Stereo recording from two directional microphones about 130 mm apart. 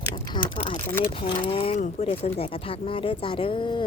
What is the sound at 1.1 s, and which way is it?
Speech, 40° left (ahead or behind).